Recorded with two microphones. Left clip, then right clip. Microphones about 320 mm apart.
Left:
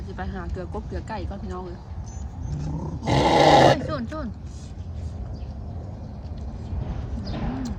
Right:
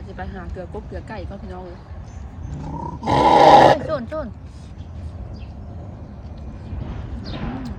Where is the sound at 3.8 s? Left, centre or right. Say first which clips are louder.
Right 6 dB; centre.